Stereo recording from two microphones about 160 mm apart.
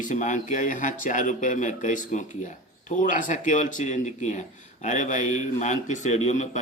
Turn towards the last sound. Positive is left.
turn(degrees=45)  # may be behind; listen again after turning